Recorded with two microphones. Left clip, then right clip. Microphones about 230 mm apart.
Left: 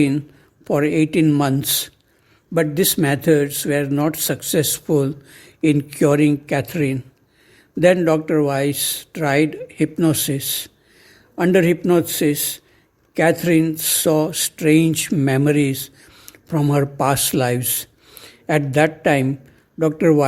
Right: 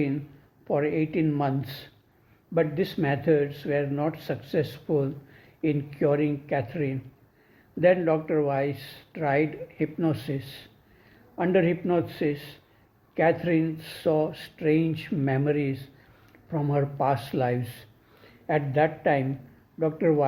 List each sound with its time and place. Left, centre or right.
0.6 s a man's voice: left